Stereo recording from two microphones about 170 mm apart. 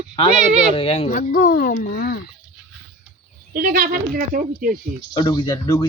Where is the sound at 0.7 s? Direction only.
35° left (ahead or behind).